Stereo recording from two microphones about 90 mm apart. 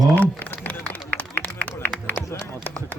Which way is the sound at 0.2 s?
15° left (ahead or behind).